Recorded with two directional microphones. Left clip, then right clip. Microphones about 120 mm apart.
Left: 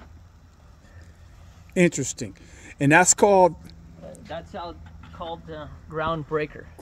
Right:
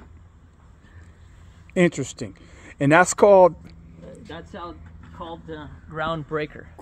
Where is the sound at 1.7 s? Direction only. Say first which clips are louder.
Right 1 dB; 10° left (ahead or behind).